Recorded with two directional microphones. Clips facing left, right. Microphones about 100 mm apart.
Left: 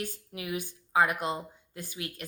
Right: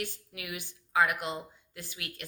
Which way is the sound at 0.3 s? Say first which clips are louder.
Left 6 dB; 40° left (ahead or behind).